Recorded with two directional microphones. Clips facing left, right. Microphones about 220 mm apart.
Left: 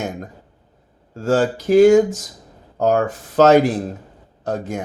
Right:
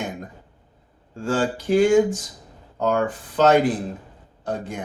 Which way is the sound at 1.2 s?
40° left (ahead or behind).